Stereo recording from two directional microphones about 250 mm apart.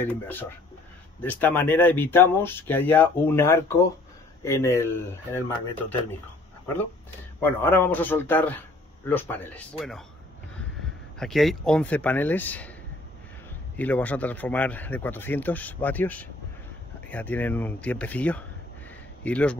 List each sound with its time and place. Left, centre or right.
0.0 s speech: centre
7.3 s speech: centre
11.1 s speech: centre
13.7 s speech: centre